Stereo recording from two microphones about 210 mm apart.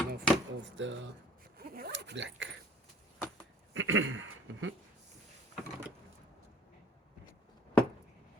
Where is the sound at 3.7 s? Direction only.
70° right (ahead or behind).